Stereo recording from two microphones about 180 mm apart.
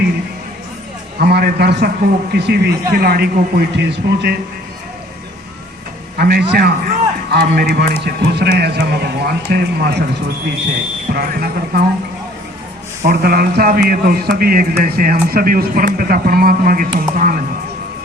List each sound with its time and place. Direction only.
1.2 s a man's voice: 60° right (ahead or behind)
6.1 s a man's voice: 60° right (ahead or behind)
11.1 s a man's voice: 55° right (ahead or behind)
13.1 s a man's voice: 55° right (ahead or behind)